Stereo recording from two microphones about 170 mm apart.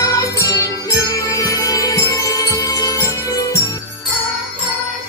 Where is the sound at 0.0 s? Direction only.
20° left (ahead or behind).